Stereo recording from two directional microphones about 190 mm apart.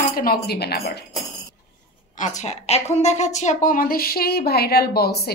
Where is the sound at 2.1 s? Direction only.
40° left (ahead or behind).